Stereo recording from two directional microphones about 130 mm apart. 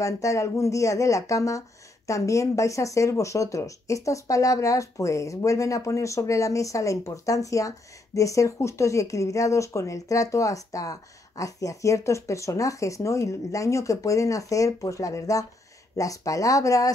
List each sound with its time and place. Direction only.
0.0 s speech: 25° left (ahead or behind)